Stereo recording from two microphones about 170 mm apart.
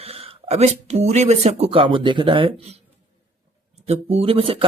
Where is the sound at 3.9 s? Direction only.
35° right (ahead or behind).